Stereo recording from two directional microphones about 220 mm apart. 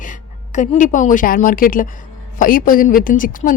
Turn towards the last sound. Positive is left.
turn(degrees=40)  # may be behind; listen again after turning